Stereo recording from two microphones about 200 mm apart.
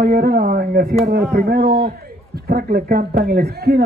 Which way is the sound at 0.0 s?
50° right (ahead or behind).